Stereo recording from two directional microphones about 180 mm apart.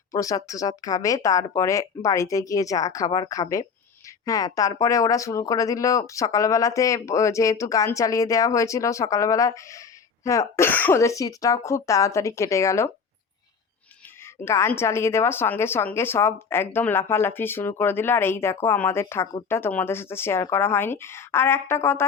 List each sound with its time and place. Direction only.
0.1 s speech: 20° left (ahead or behind)
14.4 s speech: 15° left (ahead or behind)